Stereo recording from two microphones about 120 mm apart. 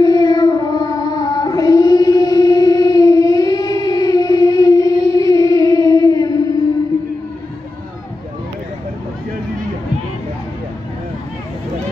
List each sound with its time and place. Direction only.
0.0 s child singing: 30° left (ahead or behind)